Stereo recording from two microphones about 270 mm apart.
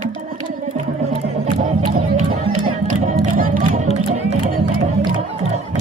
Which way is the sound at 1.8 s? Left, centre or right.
Right.